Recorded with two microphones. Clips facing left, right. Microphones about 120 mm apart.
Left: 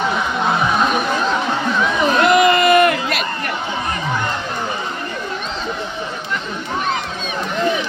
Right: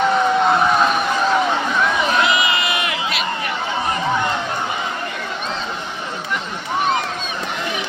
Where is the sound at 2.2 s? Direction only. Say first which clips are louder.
Left 7 dB; 50° left (ahead or behind).